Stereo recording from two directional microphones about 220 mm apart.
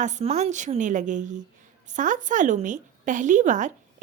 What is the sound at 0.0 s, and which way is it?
A woman's voice, 30° right (ahead or behind).